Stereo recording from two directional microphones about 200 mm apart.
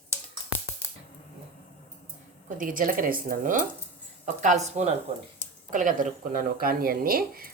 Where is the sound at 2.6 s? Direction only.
45° right (ahead or behind).